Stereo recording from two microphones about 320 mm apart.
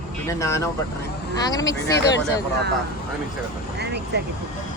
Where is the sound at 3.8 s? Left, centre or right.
Right.